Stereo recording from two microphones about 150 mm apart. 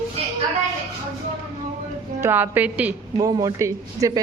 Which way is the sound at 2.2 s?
15° right (ahead or behind).